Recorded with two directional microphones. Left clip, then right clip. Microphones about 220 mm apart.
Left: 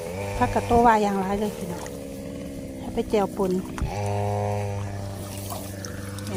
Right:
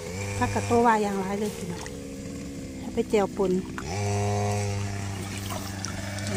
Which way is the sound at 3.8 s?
55° right (ahead or behind).